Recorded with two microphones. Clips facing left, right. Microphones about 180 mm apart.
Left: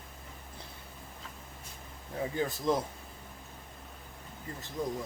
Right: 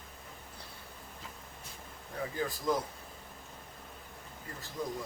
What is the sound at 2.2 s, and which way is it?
Speech, 25° left (ahead or behind).